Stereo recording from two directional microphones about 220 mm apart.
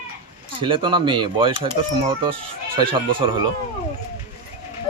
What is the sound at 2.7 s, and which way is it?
Speech, 20° right (ahead or behind).